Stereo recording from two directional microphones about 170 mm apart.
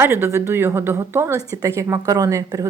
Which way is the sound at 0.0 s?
15° right (ahead or behind).